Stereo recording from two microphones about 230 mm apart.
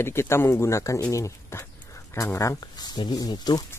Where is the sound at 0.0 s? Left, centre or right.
Centre.